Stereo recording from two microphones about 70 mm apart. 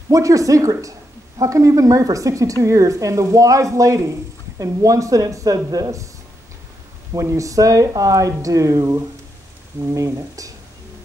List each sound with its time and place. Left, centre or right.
0.1 s a woman's voice: right
7.2 s a woman's voice: right
9.9 s a woman's voice: right